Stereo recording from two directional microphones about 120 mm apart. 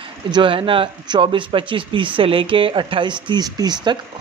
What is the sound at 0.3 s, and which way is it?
A man's voice, 45° right (ahead or behind).